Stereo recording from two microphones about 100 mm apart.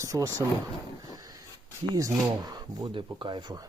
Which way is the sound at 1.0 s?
35° right (ahead or behind).